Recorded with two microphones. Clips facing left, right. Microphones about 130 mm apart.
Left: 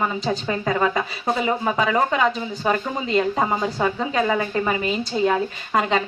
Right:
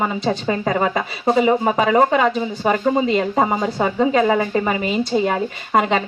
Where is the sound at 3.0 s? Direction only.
10° right (ahead or behind).